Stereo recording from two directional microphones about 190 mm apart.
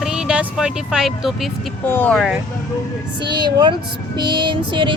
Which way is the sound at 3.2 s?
25° right (ahead or behind).